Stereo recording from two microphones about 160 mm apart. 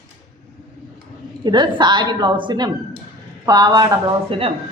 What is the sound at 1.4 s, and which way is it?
A woman's voice, 30° right (ahead or behind).